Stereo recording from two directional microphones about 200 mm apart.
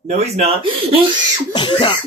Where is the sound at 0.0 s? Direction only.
35° right (ahead or behind).